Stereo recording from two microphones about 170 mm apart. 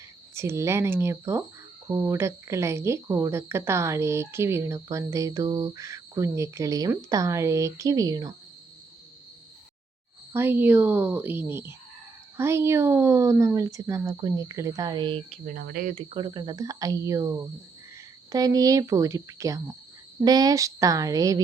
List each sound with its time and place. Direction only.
0.3 s speech: 15° right (ahead or behind)
10.3 s a woman's voice: 15° right (ahead or behind); by 15.4 s 30° right (ahead or behind)
15.4 s speech: 60° right (ahead or behind)
16.0 s a woman's voice: 30° right (ahead or behind)